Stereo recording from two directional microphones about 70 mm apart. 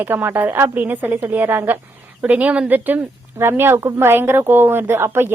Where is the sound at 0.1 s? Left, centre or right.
Right.